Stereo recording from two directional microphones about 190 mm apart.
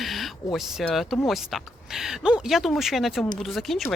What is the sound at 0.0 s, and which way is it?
Speech, centre (ahead or behind).